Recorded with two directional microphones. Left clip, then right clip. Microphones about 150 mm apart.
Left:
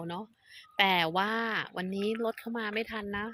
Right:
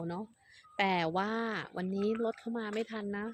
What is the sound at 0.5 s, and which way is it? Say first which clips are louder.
Speech: left 5 dB; 5° right (ahead or behind).